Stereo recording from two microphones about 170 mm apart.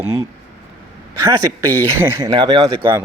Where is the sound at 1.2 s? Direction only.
20° right (ahead or behind).